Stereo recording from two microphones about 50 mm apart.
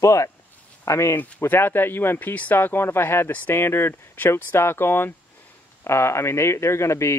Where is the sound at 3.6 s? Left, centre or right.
Left.